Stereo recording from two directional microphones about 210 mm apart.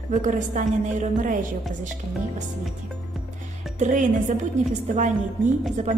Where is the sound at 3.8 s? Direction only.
35° right (ahead or behind).